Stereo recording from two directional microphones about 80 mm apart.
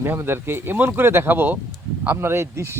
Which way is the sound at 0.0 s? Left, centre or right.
Right.